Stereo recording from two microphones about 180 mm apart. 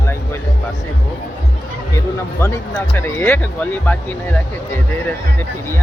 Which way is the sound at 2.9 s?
15° left (ahead or behind).